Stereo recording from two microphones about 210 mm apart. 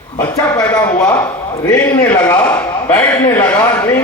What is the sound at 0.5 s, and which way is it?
A man's voice, 15° left (ahead or behind).